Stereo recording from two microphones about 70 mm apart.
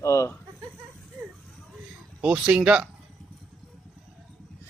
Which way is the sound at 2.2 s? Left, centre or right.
Centre.